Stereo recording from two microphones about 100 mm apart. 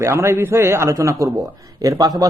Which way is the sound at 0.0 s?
25° right (ahead or behind).